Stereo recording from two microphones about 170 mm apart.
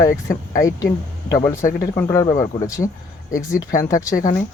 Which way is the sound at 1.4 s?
15° left (ahead or behind).